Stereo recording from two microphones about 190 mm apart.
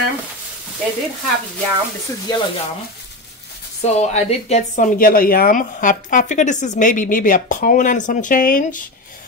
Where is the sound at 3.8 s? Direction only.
35° left (ahead or behind).